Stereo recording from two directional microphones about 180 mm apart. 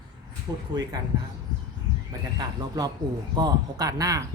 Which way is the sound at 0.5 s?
20° right (ahead or behind).